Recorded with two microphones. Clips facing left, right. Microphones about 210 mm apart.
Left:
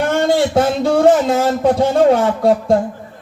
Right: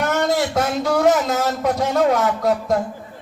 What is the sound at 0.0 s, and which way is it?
Speech, 30° left (ahead or behind).